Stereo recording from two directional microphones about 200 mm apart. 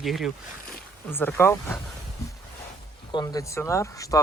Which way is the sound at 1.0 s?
10° left (ahead or behind).